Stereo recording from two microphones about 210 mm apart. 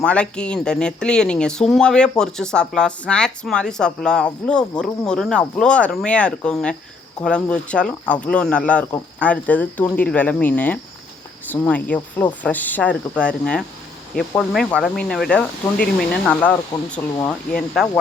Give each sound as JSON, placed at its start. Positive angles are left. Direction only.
{"t": 0.0, "sound": "speech", "side_deg": 5}